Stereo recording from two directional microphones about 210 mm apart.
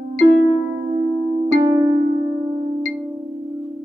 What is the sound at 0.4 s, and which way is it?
Music, 10° right (ahead or behind).